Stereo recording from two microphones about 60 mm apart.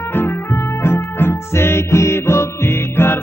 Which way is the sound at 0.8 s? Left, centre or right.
Left.